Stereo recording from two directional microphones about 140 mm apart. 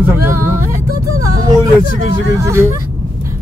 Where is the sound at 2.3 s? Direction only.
20° right (ahead or behind).